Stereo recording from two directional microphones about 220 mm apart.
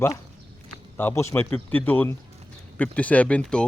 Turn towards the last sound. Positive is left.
turn(degrees=5)  # may be behind; listen again after turning